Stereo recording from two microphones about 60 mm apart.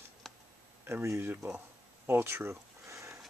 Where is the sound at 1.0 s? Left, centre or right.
Right.